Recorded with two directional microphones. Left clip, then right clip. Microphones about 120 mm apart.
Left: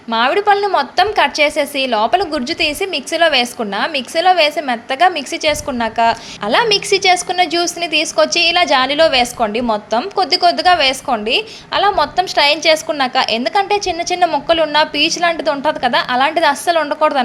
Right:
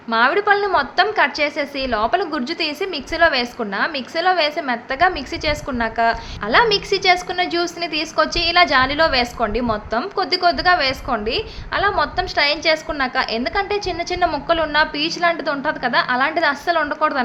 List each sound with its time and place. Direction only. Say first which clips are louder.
0.1 s a woman's voice: left 3 dB; 20° left (ahead or behind)